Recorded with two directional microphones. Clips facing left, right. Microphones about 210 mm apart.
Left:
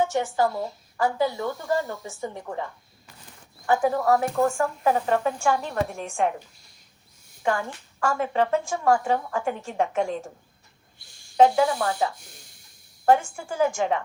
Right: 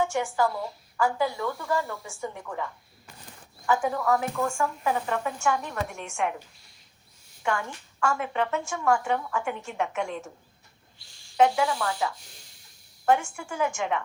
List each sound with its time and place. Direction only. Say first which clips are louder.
0.3 s speech: left 2 dB; 40° left (ahead or behind)
1.0 s speech: left 2 dB; 25° left (ahead or behind)
3.7 s a woman's voice: left 4 dB; 40° left (ahead or behind)
7.4 s a woman's voice: left 3 dB; 35° left (ahead or behind)
11.3 s a woman's voice: left 4 dB; 35° left (ahead or behind)